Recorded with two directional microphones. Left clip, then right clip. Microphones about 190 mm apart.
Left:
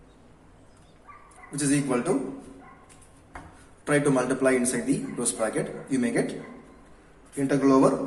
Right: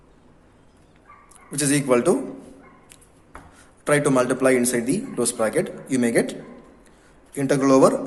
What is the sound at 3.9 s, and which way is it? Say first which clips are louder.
A man's voice: right 4 dB; 50° right (ahead or behind).